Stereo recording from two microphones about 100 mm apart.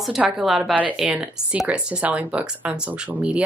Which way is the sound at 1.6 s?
10° right (ahead or behind).